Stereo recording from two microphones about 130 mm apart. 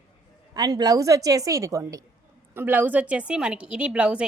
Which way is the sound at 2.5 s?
15° right (ahead or behind).